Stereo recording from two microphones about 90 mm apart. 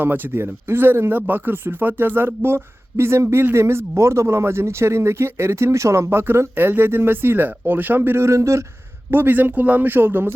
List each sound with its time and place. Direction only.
0.0 s speech: 25° right (ahead or behind)
9.0 s speech: 25° right (ahead or behind)